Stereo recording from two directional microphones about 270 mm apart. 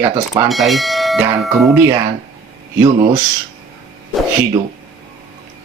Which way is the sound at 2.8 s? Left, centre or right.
Centre.